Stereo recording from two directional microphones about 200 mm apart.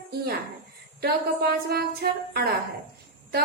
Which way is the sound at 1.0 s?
50° right (ahead or behind).